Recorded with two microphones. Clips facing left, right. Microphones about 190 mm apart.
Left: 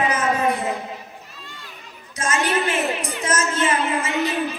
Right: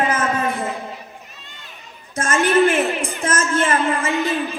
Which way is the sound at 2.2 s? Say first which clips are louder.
Right 6 dB; 50° right (ahead or behind).